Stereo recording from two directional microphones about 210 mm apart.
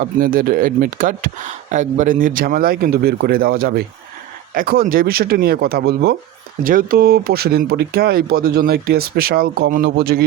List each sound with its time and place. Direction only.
0.0 s speech: 45° right (ahead or behind)